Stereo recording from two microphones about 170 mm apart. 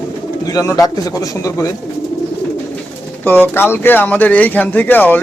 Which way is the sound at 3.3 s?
10° left (ahead or behind).